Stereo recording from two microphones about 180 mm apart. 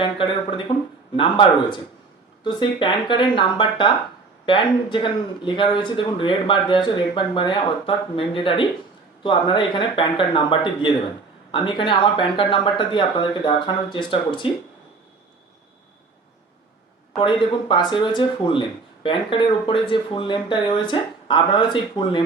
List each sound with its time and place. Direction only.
0.0 s speech: 30° left (ahead or behind)
17.2 s speech: 30° left (ahead or behind)